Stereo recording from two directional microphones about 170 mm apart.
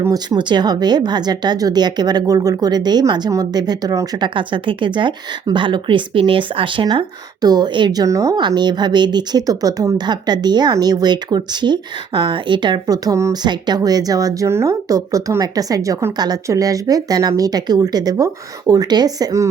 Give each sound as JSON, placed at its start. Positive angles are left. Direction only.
{"t": 0.0, "sound": "speech", "side_deg": -25}